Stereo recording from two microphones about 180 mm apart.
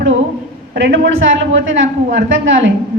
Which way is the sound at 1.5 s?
90° right.